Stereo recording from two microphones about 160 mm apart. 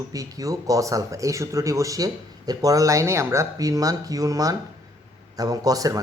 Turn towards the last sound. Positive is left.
turn(degrees=-20)  # may be behind; listen again after turning